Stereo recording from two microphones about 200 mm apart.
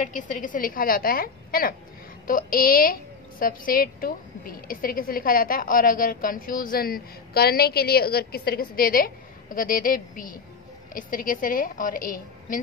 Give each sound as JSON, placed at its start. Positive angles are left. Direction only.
{"t": 0.0, "sound": "a woman's voice", "side_deg": 40}